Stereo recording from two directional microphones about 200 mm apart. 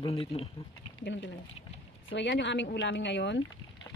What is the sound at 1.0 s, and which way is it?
Speech, 65° left (ahead or behind).